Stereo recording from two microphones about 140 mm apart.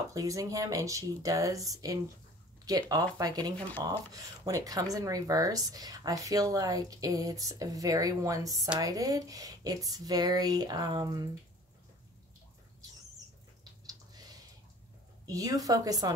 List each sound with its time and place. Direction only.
0.1 s speech: 25° right (ahead or behind)
15.2 s speech: 25° right (ahead or behind)